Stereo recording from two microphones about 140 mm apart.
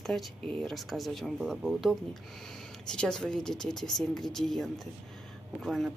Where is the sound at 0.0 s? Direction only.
Centre (ahead or behind).